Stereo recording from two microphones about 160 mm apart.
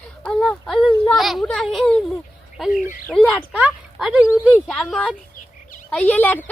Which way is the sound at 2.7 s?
55° left (ahead or behind).